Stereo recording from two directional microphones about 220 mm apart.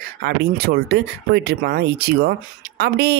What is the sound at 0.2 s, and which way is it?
Speech, 45° right (ahead or behind).